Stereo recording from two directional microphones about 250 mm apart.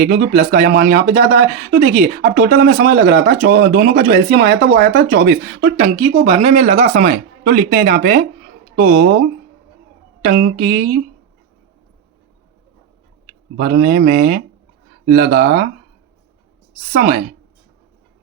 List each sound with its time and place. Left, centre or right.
0.0 s speech: right
10.2 s speech: right
13.6 s speech: right
16.9 s speech: right